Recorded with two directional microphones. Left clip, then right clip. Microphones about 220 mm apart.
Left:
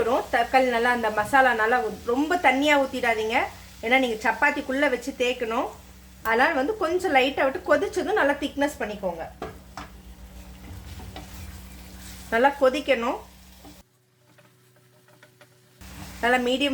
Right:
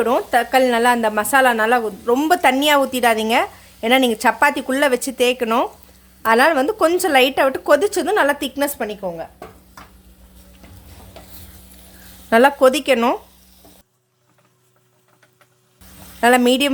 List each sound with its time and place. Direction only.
0.0 s a woman's voice: 50° right (ahead or behind)
12.3 s a woman's voice: 50° right (ahead or behind)
16.2 s a woman's voice: 50° right (ahead or behind)